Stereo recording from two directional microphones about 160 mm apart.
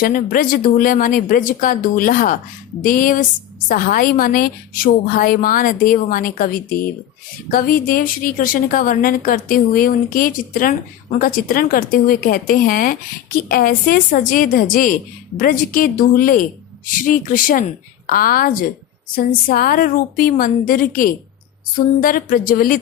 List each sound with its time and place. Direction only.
0.0 s a woman's voice: 60° left (ahead or behind)